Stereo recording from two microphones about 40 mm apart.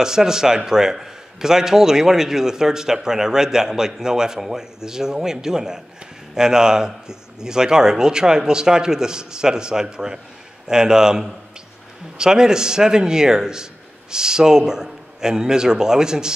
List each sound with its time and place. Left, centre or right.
0.0 s a man's voice: centre